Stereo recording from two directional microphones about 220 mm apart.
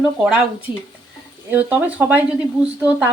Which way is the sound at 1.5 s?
5° right (ahead or behind).